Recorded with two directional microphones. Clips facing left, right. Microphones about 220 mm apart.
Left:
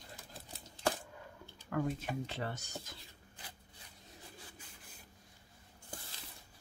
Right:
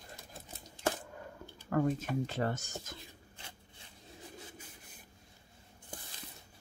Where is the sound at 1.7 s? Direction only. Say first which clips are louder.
Right 5 dB; 45° right (ahead or behind).